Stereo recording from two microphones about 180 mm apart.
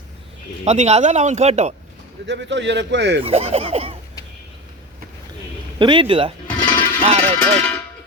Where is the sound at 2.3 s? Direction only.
85° right.